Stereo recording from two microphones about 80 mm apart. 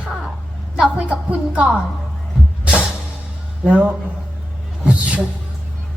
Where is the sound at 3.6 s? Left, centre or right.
Centre.